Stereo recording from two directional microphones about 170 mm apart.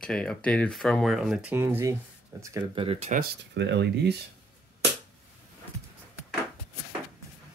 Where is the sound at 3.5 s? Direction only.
90° right.